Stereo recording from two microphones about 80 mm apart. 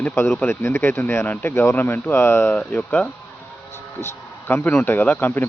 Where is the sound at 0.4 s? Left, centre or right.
Left.